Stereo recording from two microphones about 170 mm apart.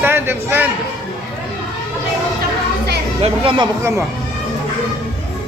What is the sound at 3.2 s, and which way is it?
Speech, 30° right (ahead or behind).